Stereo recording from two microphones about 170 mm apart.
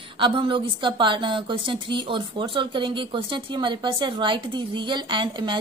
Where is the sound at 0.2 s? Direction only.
30° right (ahead or behind).